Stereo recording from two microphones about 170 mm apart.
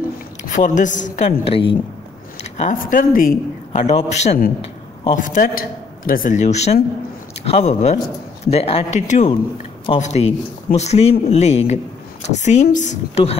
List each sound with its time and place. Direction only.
0.4 s a woman's voice: 45° left (ahead or behind)
1.4 s speech: 30° left (ahead or behind); by 3.3 s 50° left (ahead or behind)
3.7 s speech: 35° left (ahead or behind)
5.1 s speech: 50° left (ahead or behind)